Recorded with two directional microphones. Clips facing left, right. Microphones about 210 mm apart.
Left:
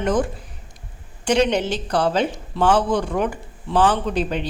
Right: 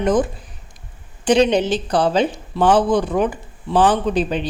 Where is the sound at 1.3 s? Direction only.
15° right (ahead or behind).